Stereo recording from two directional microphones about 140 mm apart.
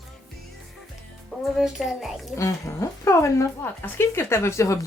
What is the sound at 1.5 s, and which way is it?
Speech, 5° right (ahead or behind).